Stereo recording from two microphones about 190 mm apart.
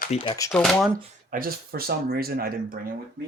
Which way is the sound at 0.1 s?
35° left (ahead or behind).